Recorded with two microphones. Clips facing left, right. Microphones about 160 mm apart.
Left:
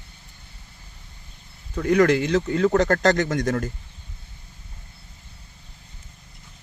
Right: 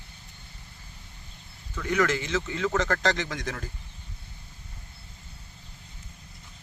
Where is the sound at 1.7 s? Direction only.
35° left (ahead or behind).